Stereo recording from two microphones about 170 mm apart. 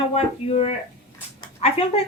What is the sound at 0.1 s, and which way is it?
Speech, 35° left (ahead or behind).